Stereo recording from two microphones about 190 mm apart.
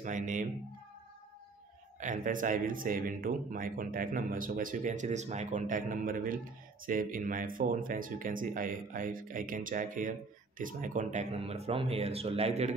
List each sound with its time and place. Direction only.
0.0 s speech: 40° right (ahead or behind)
2.0 s speech: 45° right (ahead or behind)